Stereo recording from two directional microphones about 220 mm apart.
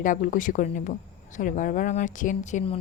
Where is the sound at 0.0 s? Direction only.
35° left (ahead or behind).